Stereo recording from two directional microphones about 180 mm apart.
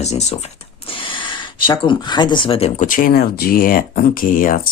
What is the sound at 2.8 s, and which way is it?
Speech, 50° left (ahead or behind).